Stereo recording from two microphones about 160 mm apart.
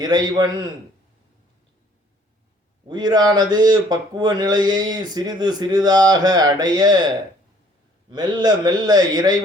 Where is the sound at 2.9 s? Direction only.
25° right (ahead or behind).